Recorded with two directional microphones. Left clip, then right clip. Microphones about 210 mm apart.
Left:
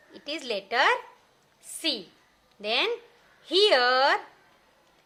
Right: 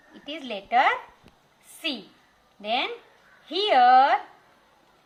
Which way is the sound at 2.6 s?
45° left (ahead or behind).